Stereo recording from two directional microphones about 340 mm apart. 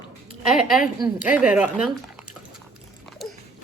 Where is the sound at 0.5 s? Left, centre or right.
Centre.